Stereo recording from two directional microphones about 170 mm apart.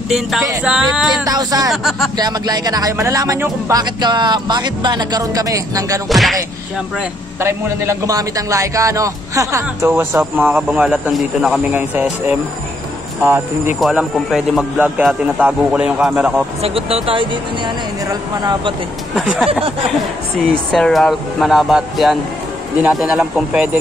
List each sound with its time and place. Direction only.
0.1 s a man's voice: centre (ahead or behind)
1.2 s speech: 20° right (ahead or behind)
1.7 s a man's voice: centre (ahead or behind)
2.1 s speech: 25° right (ahead or behind)
6.0 s a man's voice: centre (ahead or behind)
7.3 s a man's voice: 15° right (ahead or behind)
13.7 s a man's voice: centre (ahead or behind)
16.6 s speech: 35° right (ahead or behind)
19.1 s a man's voice: centre (ahead or behind)
20.7 s a man's voice: 5° left (ahead or behind)